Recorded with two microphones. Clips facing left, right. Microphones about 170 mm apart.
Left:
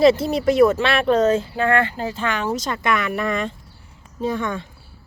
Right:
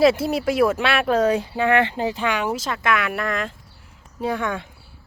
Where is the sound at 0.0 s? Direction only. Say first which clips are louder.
Left 2 dB; 5° right (ahead or behind).